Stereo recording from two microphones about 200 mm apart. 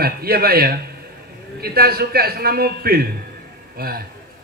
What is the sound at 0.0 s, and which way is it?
A man's voice, 50° right (ahead or behind).